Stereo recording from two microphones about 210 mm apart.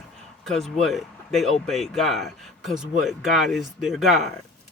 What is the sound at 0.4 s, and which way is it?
Speech, centre (ahead or behind).